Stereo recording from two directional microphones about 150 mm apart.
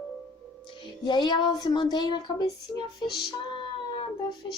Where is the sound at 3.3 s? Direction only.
35° left (ahead or behind).